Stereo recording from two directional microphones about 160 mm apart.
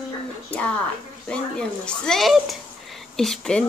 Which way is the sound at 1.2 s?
5° left (ahead or behind).